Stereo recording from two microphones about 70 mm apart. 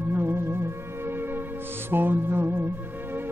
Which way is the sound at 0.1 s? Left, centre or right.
Right.